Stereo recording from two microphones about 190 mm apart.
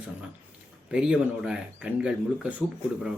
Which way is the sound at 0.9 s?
5° right (ahead or behind).